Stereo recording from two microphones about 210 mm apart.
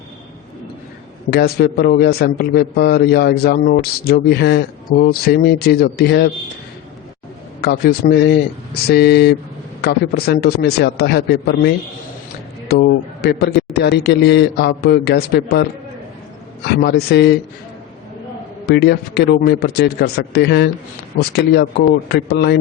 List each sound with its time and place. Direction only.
1.3 s a man's voice: 50° left (ahead or behind)
7.6 s a man's voice: 50° left (ahead or behind)
16.6 s a man's voice: 50° left (ahead or behind)
18.6 s a man's voice: 50° left (ahead or behind)